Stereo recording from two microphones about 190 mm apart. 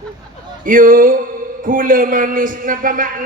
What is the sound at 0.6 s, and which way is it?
A man's voice, 45° right (ahead or behind).